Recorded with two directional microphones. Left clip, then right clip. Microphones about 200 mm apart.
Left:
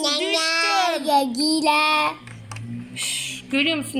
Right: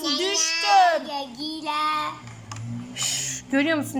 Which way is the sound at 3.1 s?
Centre (ahead or behind).